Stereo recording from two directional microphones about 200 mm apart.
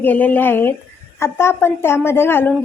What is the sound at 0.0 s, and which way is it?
A woman's voice, 10° left (ahead or behind).